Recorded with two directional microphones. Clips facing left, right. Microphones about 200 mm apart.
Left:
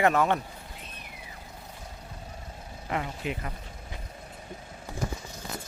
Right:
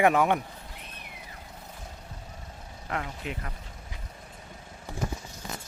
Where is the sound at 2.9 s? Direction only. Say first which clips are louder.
Left 2 dB; 5° left (ahead or behind).